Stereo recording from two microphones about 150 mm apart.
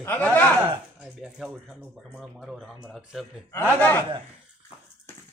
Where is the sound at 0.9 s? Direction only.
5° right (ahead or behind).